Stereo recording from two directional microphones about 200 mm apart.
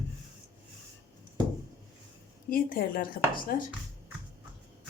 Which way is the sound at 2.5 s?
45° left (ahead or behind).